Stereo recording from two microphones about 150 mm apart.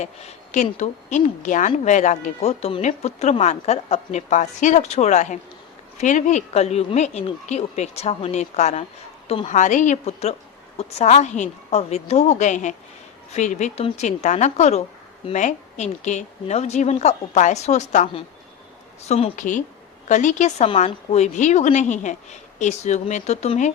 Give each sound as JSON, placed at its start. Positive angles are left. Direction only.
{"t": 0.0, "sound": "a woman's voice", "side_deg": 45}
{"t": 9.2, "sound": "a woman's voice", "side_deg": 40}
{"t": 9.5, "sound": "a woman's voice", "side_deg": 55}